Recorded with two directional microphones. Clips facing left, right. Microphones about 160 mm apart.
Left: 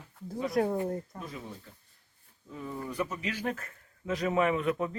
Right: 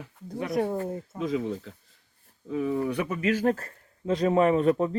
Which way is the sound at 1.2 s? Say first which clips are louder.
Right 14 dB; 90° right.